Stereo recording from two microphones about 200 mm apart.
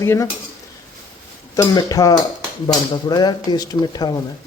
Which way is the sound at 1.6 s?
15° left (ahead or behind).